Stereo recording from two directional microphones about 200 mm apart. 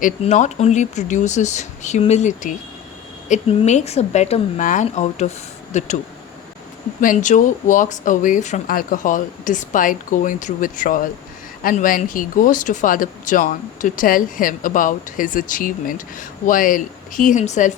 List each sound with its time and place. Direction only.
0.0 s speech: 35° left (ahead or behind)
7.0 s speech: 40° left (ahead or behind)